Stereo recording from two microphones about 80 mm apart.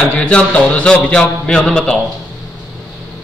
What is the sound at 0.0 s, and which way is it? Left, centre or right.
A man's voice, centre.